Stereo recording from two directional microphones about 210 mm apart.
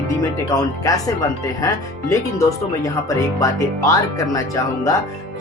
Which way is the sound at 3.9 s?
15° left (ahead or behind).